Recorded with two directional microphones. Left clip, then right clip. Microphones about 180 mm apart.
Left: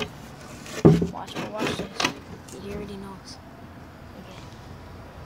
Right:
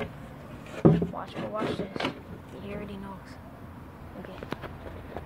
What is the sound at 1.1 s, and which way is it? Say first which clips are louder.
Speech: left 2 dB; 15° left (ahead or behind).